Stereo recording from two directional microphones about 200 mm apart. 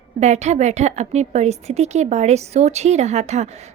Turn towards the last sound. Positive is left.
turn(degrees=-35)  # may be behind; listen again after turning